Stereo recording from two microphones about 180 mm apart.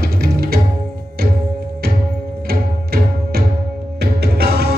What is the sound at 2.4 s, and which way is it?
Music, 60° right (ahead or behind).